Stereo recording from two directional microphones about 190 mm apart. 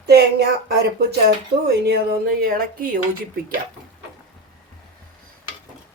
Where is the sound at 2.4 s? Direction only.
50° right (ahead or behind).